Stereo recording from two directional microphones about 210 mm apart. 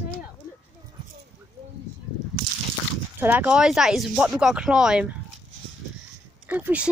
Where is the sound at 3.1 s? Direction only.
10° right (ahead or behind).